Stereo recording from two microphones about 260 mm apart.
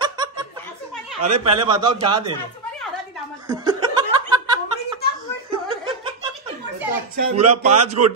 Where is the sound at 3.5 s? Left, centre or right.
Centre.